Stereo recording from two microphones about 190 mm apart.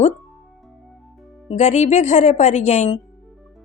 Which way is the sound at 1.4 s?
35° left (ahead or behind).